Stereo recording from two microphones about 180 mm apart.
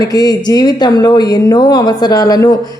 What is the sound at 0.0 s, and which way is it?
A woman's voice, 20° left (ahead or behind).